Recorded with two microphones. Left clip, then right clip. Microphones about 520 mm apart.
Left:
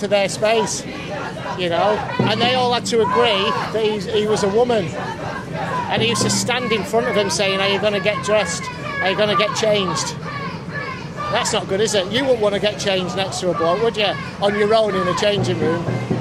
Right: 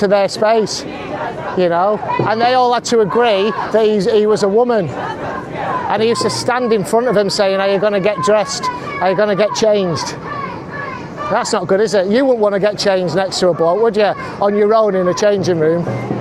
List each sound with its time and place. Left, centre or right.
0.0 s speech: right
5.9 s speech: right
11.3 s speech: right